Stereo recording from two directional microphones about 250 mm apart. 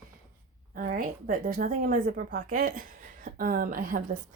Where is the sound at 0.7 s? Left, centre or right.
Right.